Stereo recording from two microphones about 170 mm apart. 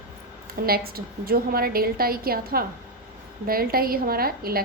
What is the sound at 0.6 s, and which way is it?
A woman's voice, 65° right (ahead or behind).